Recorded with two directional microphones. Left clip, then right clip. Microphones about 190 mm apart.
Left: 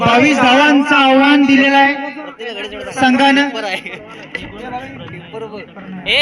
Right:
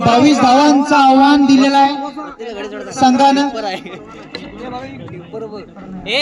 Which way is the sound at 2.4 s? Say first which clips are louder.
Left 2 dB; 65° right (ahead or behind).